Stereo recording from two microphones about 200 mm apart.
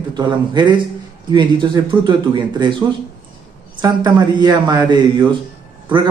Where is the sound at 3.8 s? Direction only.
20° right (ahead or behind).